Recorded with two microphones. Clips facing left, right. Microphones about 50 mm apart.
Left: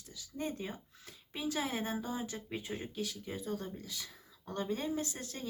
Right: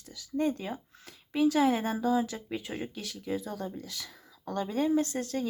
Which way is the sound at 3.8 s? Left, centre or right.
Right.